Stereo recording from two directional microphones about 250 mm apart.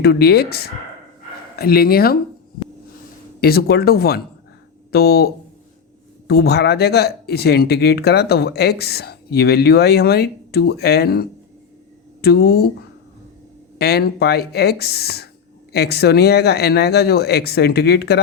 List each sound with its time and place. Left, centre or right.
0.0 s speech: left
3.4 s speech: left
13.7 s speech: left